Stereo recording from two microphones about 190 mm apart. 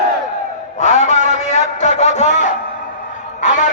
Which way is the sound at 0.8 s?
35° left (ahead or behind).